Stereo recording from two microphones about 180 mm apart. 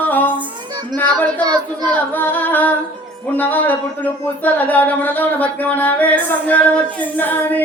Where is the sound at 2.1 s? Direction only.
10° left (ahead or behind).